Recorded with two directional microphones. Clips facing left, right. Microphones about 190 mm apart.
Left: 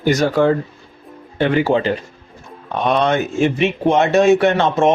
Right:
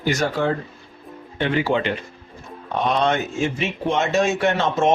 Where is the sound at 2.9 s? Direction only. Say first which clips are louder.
Left 6 dB; 65° left (ahead or behind).